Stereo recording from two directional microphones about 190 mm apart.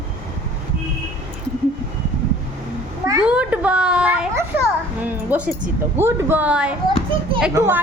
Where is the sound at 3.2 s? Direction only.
5° right (ahead or behind).